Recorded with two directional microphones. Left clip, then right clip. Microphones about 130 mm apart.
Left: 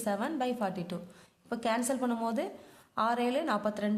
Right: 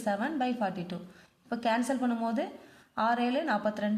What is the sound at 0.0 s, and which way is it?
A woman's voice, 20° left (ahead or behind).